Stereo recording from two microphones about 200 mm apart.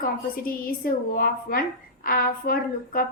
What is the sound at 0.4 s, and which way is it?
A woman's voice, 45° left (ahead or behind).